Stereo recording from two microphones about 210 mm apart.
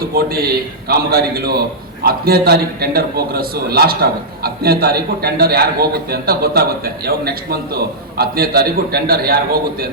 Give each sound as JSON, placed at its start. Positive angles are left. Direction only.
{"t": 0.9, "sound": "a man's voice", "side_deg": -45}